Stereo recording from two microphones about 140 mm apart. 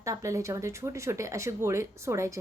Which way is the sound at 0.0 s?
20° right (ahead or behind).